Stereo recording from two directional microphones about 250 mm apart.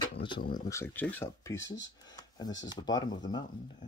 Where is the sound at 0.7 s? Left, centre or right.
Centre.